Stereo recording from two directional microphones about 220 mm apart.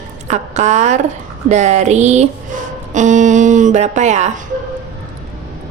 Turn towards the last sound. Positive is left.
turn(degrees=-30)  # may be behind; listen again after turning